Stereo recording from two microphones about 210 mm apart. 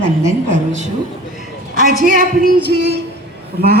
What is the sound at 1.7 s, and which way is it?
Speech, 40° right (ahead or behind).